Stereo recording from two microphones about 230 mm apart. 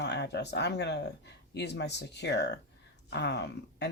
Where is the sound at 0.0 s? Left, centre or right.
Left.